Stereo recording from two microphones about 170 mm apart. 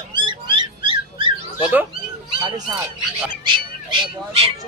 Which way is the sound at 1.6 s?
10° right (ahead or behind).